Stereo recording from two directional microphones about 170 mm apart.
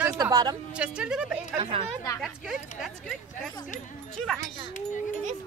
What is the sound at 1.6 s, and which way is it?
Speech, 35° right (ahead or behind).